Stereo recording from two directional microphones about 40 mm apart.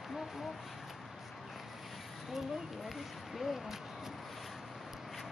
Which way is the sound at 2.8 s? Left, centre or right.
Centre.